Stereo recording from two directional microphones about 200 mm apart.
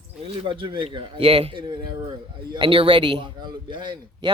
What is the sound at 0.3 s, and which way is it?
A man's voice, 25° right (ahead or behind).